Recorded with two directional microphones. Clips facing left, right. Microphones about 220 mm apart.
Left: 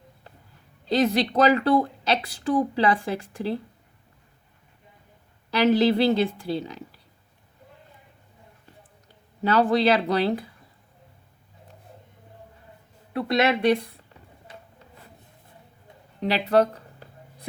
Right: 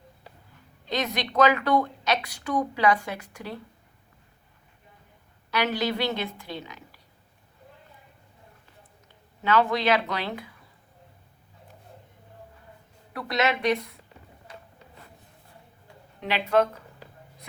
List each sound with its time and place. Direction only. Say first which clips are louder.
0.9 s a woman's voice: left 8 dB; 30° left (ahead or behind)
5.5 s a woman's voice: left 8 dB; 30° left (ahead or behind)
9.4 s a woman's voice: left 3 dB; 35° left (ahead or behind)
13.1 s a woman's voice: left 4 dB; 25° left (ahead or behind)
16.2 s a woman's voice: left 3 dB; 35° left (ahead or behind)